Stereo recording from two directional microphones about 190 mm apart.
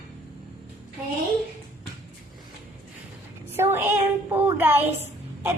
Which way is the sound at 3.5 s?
10° right (ahead or behind).